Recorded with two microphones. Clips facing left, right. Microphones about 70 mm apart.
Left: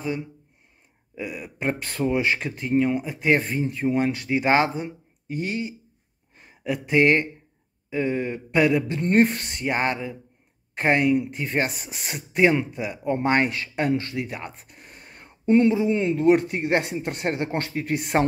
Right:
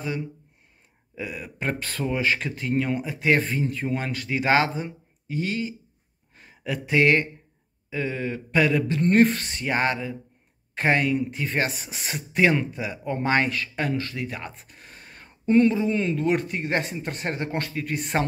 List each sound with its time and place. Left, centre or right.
1.1 s speech: centre
1.7 s speech: left
2.7 s speech: centre
11.8 s speech: centre
13.0 s speech: left
14.2 s a sound: centre
15.9 s speech: left